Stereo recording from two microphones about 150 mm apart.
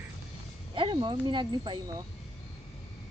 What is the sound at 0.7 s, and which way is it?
Speech, 35° right (ahead or behind).